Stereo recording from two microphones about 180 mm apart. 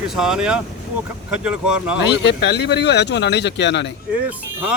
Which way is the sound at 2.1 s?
75° left (ahead or behind).